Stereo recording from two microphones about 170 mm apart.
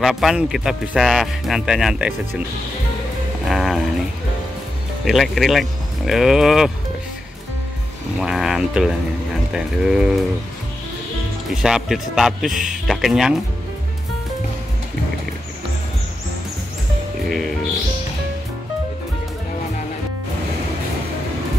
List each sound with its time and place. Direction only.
0.0 s speech: centre (ahead or behind)
3.4 s a sound: centre (ahead or behind)
5.0 s speech: centre (ahead or behind)
8.2 s speech: centre (ahead or behind)
11.6 s speech: 5° right (ahead or behind)